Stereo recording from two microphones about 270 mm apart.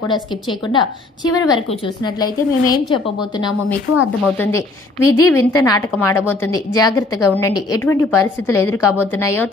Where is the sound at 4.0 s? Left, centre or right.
Centre.